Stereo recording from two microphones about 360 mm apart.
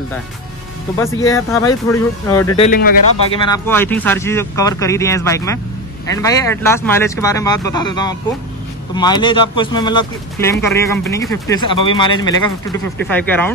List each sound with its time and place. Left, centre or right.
0.9 s speech: centre
2.5 s speech: centre
3.3 s speech: centre